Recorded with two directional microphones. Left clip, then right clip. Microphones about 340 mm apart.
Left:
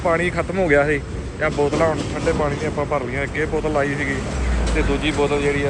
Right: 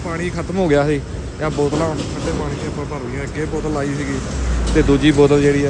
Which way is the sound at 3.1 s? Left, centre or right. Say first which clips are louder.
Left 2 dB; centre.